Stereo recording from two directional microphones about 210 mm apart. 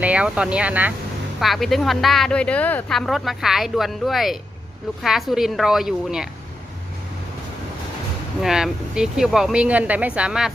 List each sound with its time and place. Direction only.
0.0 s speech: 5° right (ahead or behind)
8.4 s speech: centre (ahead or behind)